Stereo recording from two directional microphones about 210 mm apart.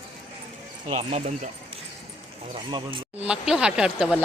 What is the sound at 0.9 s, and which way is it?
Speech, 30° right (ahead or behind).